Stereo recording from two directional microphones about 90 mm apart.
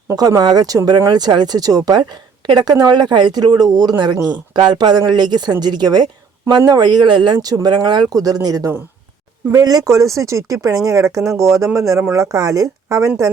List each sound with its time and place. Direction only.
0.2 s speech: 45° right (ahead or behind)